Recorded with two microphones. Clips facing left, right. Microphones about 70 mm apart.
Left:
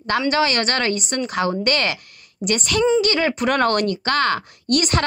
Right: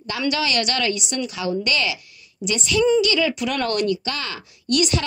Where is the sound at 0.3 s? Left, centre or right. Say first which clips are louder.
Left 1 dB; left.